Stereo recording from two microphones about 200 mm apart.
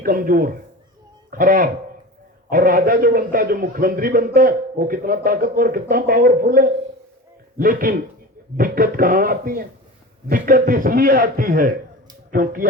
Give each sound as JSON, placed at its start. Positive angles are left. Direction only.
{"t": 0.0, "sound": "speech", "side_deg": -45}